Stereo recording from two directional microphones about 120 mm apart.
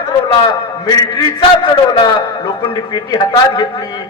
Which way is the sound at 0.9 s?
35° left (ahead or behind).